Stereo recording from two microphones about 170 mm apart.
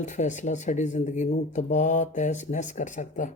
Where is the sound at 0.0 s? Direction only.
45° left (ahead or behind).